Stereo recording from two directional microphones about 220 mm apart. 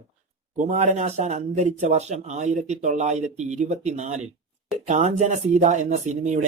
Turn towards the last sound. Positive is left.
turn(degrees=-30)  # may be behind; listen again after turning